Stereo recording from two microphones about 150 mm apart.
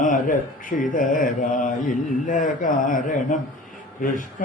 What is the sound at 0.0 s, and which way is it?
Speech, 60° left (ahead or behind).